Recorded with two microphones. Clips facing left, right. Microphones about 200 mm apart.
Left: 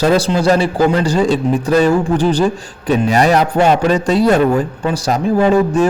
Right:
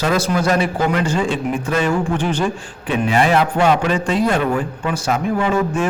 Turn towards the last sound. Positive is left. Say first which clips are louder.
# left 6 dB
turn(degrees=35)  # may be behind; listen again after turning